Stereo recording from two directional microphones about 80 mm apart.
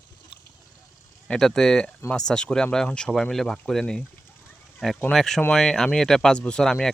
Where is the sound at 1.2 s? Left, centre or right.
Centre.